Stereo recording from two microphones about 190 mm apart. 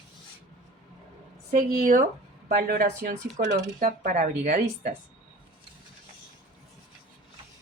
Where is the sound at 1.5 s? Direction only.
45° right (ahead or behind).